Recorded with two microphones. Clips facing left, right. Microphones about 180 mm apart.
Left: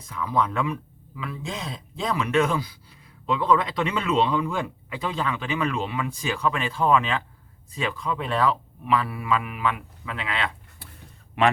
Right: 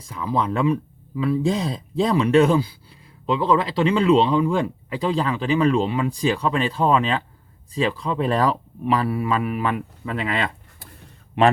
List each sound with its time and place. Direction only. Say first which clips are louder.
0.0 s speech: right 2 dB; 30° right (ahead or behind)
11.4 s speech: right 4 dB; 30° right (ahead or behind)